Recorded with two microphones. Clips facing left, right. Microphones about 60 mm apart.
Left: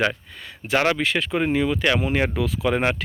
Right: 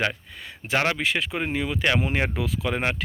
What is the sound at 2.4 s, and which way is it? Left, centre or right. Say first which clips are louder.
Speech: left 4 dB; centre.